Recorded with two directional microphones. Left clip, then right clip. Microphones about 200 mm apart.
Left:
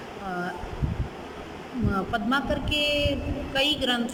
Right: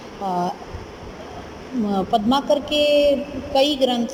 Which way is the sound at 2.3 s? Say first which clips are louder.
Right 5 dB; 25° right (ahead or behind).